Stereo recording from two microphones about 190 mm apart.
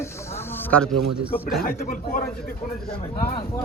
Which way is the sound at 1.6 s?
50° left (ahead or behind).